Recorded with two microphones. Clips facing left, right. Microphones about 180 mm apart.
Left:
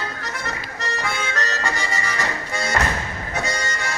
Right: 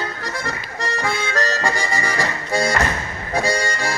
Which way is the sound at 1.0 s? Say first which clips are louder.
Right 5 dB; 35° right (ahead or behind).